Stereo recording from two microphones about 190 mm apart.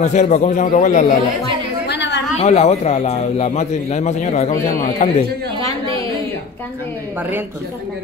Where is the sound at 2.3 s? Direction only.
35° left (ahead or behind).